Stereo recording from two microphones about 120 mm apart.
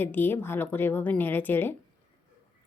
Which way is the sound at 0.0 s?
15° left (ahead or behind).